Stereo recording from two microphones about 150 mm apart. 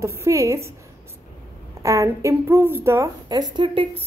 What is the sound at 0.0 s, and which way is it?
Speech, 20° right (ahead or behind).